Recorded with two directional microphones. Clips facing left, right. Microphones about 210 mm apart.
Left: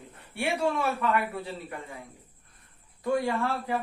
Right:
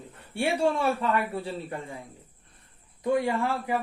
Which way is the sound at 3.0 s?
20° right (ahead or behind).